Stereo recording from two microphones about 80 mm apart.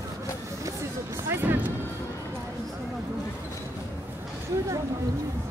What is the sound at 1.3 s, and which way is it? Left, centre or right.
Music, right.